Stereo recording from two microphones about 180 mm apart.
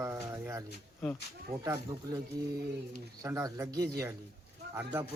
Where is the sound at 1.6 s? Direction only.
15° right (ahead or behind).